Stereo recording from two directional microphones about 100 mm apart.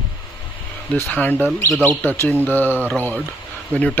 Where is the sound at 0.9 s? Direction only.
15° left (ahead or behind).